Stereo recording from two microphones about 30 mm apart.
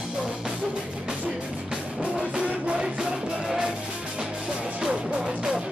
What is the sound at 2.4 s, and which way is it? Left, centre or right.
Music, right.